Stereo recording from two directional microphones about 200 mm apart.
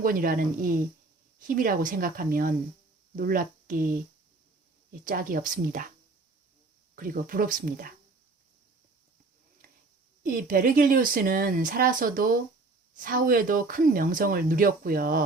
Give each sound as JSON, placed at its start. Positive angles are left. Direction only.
{"t": 0.0, "sound": "speech", "side_deg": -45}
{"t": 6.9, "sound": "speech", "side_deg": -45}
{"t": 10.2, "sound": "speech", "side_deg": -45}